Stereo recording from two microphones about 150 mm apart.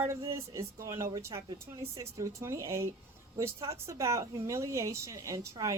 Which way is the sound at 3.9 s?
20° right (ahead or behind).